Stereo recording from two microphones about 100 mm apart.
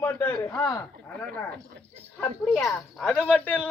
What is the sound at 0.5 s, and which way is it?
Speech, 35° left (ahead or behind).